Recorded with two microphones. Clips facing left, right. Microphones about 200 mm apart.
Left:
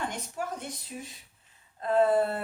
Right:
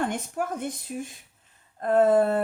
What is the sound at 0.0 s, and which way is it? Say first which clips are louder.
Speech: right 6 dB; 50° right (ahead or behind).